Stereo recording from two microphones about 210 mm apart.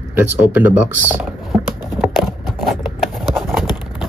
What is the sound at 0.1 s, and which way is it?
Speech, 10° right (ahead or behind).